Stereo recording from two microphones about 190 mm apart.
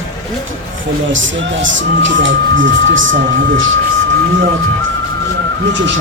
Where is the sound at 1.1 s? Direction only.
80° right.